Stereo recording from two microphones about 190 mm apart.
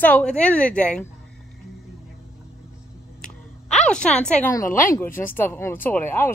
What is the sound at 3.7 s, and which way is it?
Speech, 5° left (ahead or behind).